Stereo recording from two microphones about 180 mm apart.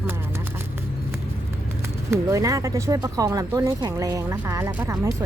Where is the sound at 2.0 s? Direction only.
20° right (ahead or behind).